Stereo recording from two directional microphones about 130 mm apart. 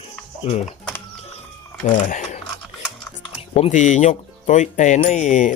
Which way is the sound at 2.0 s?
80° left.